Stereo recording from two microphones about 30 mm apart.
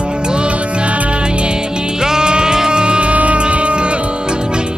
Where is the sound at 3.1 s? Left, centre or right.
Right.